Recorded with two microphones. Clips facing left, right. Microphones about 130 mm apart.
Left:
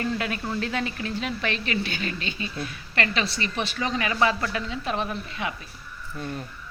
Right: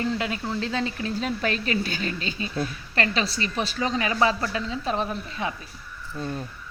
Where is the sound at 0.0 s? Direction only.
20° right (ahead or behind).